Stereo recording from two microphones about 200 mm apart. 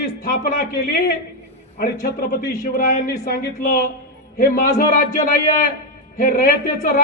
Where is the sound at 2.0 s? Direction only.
55° left (ahead or behind).